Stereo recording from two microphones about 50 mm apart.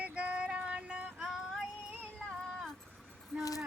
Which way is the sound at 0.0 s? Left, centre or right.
Right.